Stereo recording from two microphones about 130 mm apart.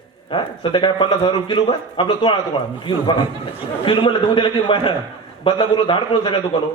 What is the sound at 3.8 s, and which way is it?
A man's voice, 40° left (ahead or behind).